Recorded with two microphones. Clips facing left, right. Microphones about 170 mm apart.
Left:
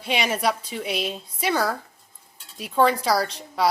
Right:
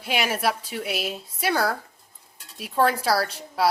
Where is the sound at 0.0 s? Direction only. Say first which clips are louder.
Left 1 dB; 5° right (ahead or behind).